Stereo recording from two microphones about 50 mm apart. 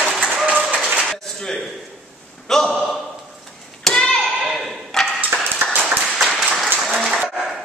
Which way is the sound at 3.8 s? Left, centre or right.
Centre.